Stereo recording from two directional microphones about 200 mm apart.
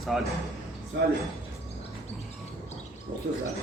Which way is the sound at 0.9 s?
55° right (ahead or behind).